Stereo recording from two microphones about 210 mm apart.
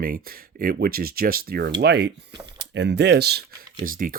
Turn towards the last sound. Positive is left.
turn(degrees=-40)  # may be behind; listen again after turning